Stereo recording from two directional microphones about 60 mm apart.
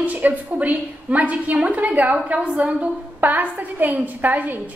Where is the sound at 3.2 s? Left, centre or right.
Right.